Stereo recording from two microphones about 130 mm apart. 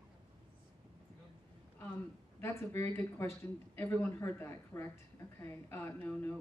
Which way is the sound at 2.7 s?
20° left (ahead or behind).